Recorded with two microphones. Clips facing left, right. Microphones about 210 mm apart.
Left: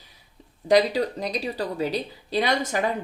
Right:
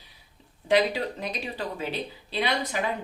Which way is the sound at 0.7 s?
40° left (ahead or behind).